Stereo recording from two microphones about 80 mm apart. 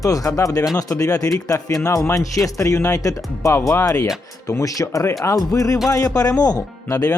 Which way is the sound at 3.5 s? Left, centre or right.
Left.